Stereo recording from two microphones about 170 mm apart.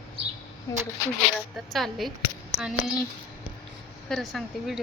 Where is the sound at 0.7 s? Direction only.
20° left (ahead or behind).